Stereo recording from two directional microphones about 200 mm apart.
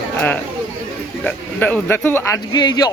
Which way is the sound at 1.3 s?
10° left (ahead or behind).